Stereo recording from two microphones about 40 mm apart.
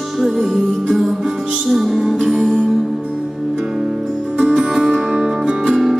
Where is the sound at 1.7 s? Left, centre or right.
Centre.